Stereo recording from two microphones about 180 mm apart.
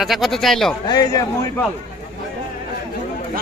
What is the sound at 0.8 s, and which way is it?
Speech, 20° left (ahead or behind).